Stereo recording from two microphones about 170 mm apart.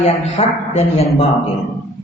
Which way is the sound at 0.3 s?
40° left (ahead or behind).